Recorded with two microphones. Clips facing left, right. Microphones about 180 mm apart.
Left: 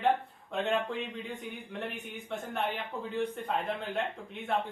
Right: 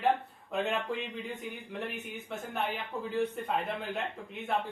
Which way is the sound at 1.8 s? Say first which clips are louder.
Right 1 dB; centre (ahead or behind).